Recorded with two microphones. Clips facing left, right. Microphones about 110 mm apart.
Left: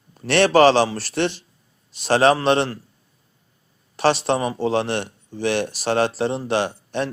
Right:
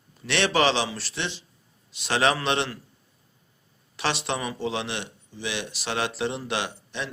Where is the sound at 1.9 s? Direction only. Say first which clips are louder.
Left 7 dB; 40° left (ahead or behind).